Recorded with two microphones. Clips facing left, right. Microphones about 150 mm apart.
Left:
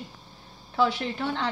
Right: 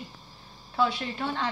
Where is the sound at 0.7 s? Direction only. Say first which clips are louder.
Left 2 dB; 60° left (ahead or behind).